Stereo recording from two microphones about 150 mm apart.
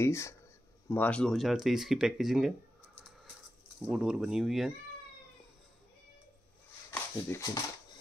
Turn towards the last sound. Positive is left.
turn(degrees=20)  # may be behind; listen again after turning